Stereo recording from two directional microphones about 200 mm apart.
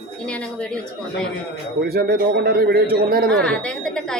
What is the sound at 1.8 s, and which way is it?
A man's voice, 50° right (ahead or behind).